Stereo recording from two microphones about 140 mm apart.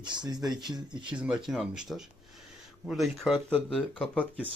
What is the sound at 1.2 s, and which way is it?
Speech, 5° right (ahead or behind).